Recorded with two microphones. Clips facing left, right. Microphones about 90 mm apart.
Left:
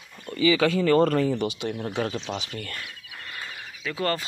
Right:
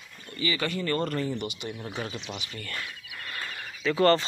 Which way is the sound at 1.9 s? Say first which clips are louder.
Left 7 dB; 65° left (ahead or behind).